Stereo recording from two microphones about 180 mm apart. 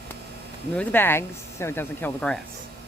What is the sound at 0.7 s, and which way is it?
Speech, 10° left (ahead or behind).